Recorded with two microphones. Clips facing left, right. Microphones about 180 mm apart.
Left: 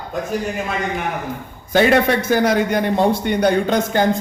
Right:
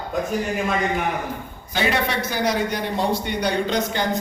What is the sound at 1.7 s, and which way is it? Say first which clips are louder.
A man's voice: left 8 dB; 50° left (ahead or behind).